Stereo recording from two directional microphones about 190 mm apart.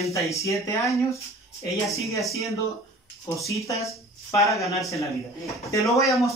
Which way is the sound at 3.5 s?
15° left (ahead or behind).